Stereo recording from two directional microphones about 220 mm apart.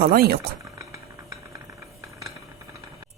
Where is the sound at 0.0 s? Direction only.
45° right (ahead or behind).